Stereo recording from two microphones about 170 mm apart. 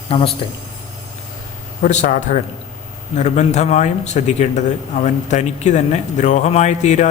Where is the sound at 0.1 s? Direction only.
35° left (ahead or behind).